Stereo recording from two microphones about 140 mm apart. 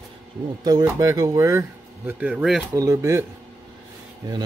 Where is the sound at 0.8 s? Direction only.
25° right (ahead or behind).